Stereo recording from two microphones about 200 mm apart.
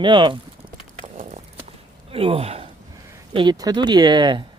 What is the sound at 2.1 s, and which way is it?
Speech, 30° right (ahead or behind).